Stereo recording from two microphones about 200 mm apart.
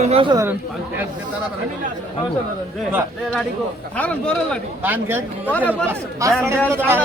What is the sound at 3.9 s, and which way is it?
Speech, 5° left (ahead or behind).